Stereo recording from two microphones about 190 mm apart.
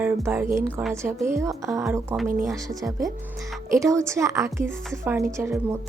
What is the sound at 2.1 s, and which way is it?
Speech, centre (ahead or behind).